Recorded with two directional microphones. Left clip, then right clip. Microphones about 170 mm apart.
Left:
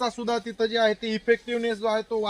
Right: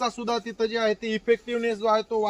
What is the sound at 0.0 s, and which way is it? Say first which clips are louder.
Speech: even; 25° right (ahead or behind).